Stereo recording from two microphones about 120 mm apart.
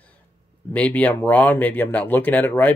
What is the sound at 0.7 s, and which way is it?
Speech, 15° left (ahead or behind).